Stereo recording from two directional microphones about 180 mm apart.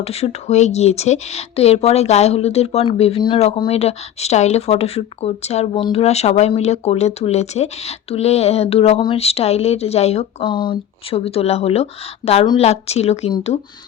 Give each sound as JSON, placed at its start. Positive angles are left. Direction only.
{"t": 0.0, "sound": "speech", "side_deg": 35}